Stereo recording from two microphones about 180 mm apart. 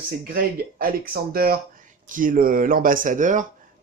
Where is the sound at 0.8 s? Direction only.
55° right (ahead or behind).